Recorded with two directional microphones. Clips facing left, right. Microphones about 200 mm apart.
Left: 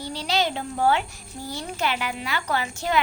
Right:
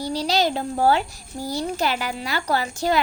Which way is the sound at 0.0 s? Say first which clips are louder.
Right 4 dB; 40° right (ahead or behind).